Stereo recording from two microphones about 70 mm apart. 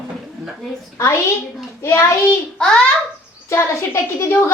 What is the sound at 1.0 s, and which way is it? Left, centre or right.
A woman's voice, left.